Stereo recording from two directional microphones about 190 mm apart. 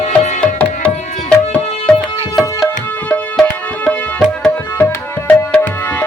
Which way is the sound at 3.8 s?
5° left (ahead or behind).